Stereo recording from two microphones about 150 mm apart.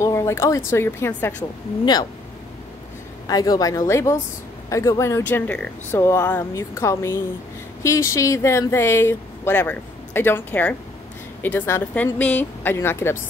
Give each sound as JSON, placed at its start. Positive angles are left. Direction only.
{"t": 0.0, "sound": "speech", "side_deg": 20}
{"t": 3.3, "sound": "speech", "side_deg": 25}